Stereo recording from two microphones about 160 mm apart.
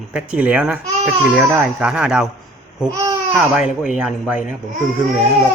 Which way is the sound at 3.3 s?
5° right (ahead or behind).